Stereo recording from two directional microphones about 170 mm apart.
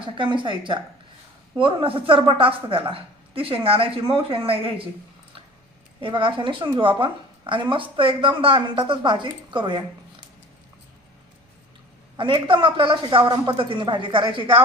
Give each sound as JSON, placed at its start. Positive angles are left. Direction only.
{"t": 0.0, "sound": "speech", "side_deg": -30}
{"t": 6.0, "sound": "a woman's voice", "side_deg": -30}
{"t": 12.1, "sound": "a woman's voice", "side_deg": -30}